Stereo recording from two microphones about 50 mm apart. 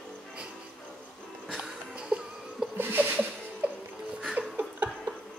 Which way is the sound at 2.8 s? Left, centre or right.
Right.